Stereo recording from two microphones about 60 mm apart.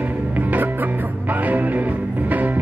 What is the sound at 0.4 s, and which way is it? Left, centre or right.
Music, right.